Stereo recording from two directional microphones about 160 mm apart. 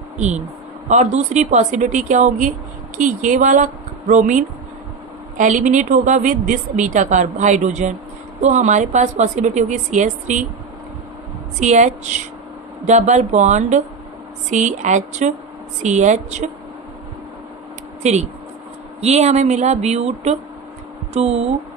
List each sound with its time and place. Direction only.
0.8 s a woman's voice: 50° right (ahead or behind)
11.6 s a woman's voice: 50° right (ahead or behind)
18.0 s a woman's voice: 45° right (ahead or behind)